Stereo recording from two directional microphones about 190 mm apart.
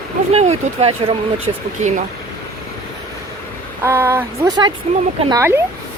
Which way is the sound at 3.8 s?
10° right (ahead or behind).